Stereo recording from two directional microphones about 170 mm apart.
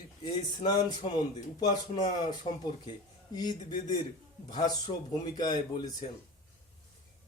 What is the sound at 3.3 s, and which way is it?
Speech, 25° left (ahead or behind).